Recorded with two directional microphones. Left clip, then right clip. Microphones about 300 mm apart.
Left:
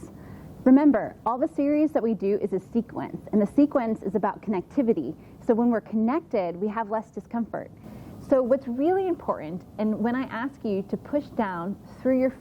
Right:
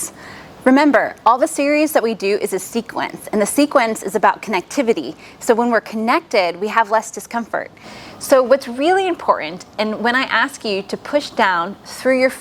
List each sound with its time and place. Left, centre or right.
0.6 s a woman's voice: centre